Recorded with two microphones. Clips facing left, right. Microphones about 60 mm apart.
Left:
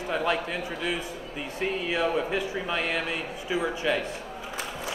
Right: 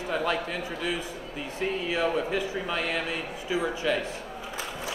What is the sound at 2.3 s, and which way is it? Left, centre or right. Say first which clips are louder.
Speech: even; left.